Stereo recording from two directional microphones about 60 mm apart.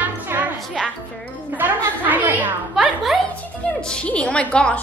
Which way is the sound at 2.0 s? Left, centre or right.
Right.